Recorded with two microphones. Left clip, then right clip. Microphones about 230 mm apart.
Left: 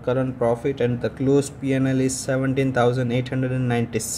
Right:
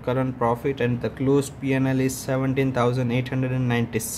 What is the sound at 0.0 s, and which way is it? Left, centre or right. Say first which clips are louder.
Speech: left 2 dB; centre.